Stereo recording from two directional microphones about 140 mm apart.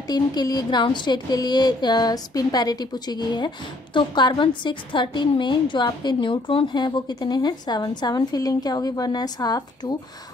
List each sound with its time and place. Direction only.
0.0 s a woman's voice: 30° left (ahead or behind)